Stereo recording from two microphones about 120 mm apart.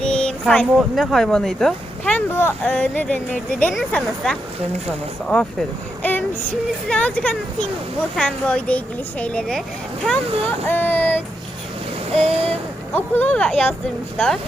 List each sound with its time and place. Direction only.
0.0 s speech: 10° left (ahead or behind)
10.7 s speech: 15° left (ahead or behind)
12.1 s a sound: 55° right (ahead or behind)
12.9 s speech: 15° left (ahead or behind)